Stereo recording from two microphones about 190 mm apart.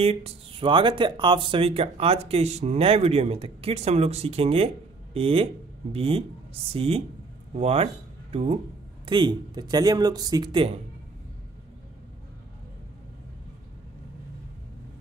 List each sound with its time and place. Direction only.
0.0 s speech: 30° right (ahead or behind)